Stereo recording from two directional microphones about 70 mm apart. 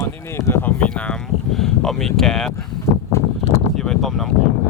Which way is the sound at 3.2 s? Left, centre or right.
Left.